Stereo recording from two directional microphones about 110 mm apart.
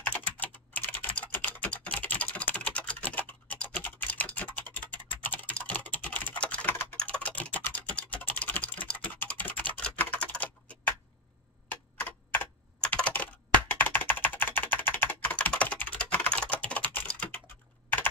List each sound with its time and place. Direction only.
0.0 s typing: 15° left (ahead or behind)
11.7 s computer keyboard: 15° left (ahead or behind)